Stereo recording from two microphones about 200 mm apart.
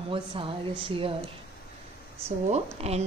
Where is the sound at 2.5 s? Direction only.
30° right (ahead or behind).